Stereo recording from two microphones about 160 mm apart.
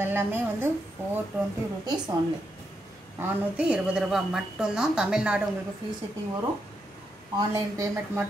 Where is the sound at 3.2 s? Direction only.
5° right (ahead or behind).